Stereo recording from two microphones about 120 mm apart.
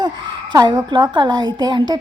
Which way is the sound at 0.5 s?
35° right (ahead or behind).